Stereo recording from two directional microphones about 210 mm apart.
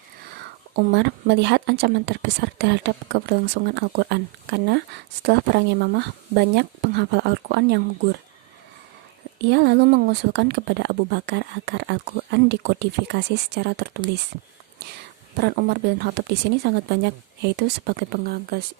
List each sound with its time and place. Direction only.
0.9 s speech: 55° right (ahead or behind)
9.4 s speech: 55° right (ahead or behind)
15.4 s speech: 50° right (ahead or behind)